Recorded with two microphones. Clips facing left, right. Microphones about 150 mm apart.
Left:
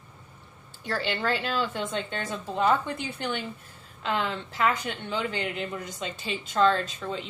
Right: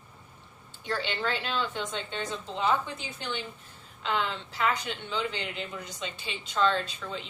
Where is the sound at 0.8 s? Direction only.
45° left (ahead or behind).